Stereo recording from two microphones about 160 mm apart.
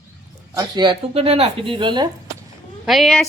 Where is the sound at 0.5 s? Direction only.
25° right (ahead or behind).